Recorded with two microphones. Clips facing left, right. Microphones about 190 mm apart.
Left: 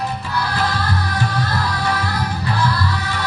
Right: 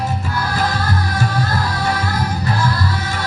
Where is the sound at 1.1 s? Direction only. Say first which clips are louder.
Right 2 dB; 45° right (ahead or behind).